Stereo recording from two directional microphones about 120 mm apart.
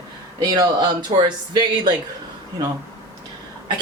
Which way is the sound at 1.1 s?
60° right (ahead or behind).